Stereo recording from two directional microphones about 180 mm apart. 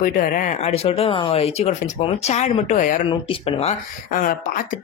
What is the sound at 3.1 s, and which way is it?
Speech, 30° left (ahead or behind).